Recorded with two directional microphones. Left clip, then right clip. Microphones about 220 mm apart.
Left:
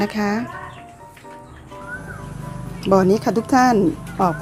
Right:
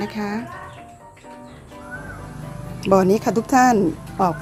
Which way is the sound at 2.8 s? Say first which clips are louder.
Even; 5° right (ahead or behind).